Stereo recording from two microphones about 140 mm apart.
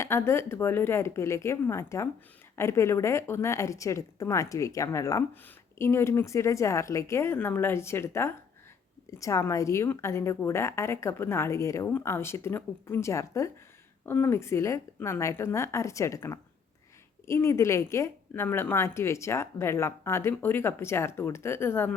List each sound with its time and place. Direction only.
0.0 s a woman's voice: 20° left (ahead or behind)